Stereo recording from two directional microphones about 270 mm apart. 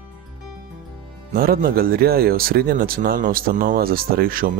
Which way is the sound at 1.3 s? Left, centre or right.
Right.